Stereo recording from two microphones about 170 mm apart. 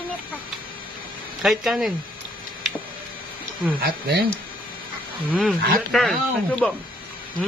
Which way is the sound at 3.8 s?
65° right (ahead or behind).